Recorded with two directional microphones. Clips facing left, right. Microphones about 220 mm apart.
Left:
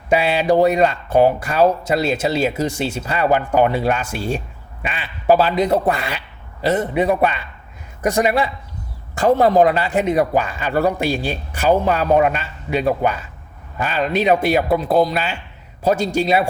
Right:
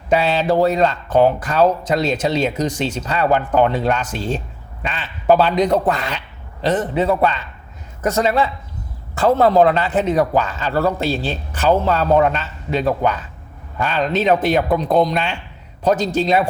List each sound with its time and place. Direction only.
0.1 s a man's voice: 10° left (ahead or behind)